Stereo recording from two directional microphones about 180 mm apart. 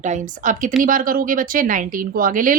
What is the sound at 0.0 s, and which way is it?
A woman's voice, 45° right (ahead or behind).